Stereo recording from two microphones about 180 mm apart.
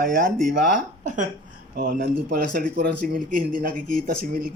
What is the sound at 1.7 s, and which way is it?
Speech, 55° right (ahead or behind).